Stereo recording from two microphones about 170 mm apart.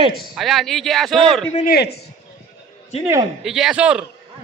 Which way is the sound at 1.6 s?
70° left (ahead or behind).